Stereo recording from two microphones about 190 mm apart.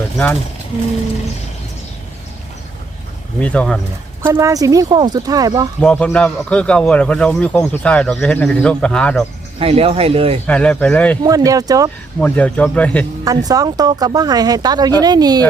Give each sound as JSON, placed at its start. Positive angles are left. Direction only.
{"t": 3.4, "sound": "speech", "side_deg": 5}
{"t": 4.2, "sound": "speech", "side_deg": -15}
{"t": 5.8, "sound": "a man's voice", "side_deg": 5}
{"t": 9.6, "sound": "speech", "side_deg": -30}
{"t": 10.4, "sound": "speech", "side_deg": 5}
{"t": 11.2, "sound": "speech", "side_deg": -20}
{"t": 12.2, "sound": "speech", "side_deg": 10}
{"t": 13.2, "sound": "speech", "side_deg": -20}